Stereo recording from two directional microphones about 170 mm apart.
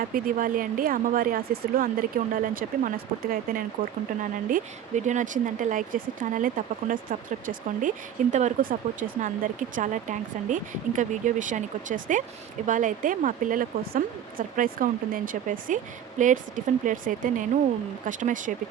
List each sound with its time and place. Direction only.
0.0 s speech: 55° right (ahead or behind)